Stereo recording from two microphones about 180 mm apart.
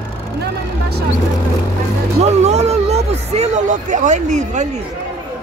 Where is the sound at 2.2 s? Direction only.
40° right (ahead or behind).